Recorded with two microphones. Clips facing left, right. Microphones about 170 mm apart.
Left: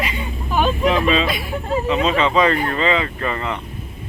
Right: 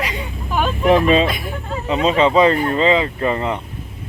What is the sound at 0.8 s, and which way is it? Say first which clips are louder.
Speech: right 8 dB; 45° right (ahead or behind).